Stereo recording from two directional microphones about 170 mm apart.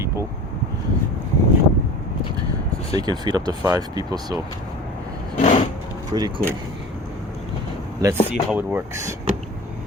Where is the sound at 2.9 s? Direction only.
25° right (ahead or behind).